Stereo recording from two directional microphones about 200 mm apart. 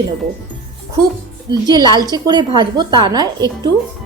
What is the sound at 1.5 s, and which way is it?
A woman's voice, 20° right (ahead or behind).